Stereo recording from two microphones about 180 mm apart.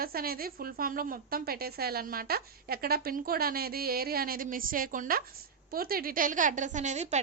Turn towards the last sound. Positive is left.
turn(degrees=-40)  # may be behind; listen again after turning